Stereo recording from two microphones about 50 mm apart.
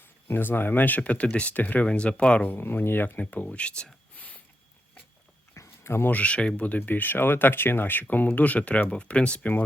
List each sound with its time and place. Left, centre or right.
0.0 s speech: left
1.9 s speech: left
2.5 s speech: left
3.2 s speech: left
4.2 s a sound: left
5.5 s a sound: left
6.1 s speech: left
6.6 s speech: left